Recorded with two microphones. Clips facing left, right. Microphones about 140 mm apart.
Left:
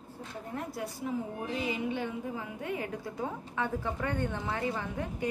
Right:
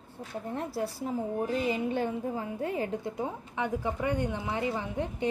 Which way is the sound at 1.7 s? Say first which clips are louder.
Right 4 dB; 45° right (ahead or behind).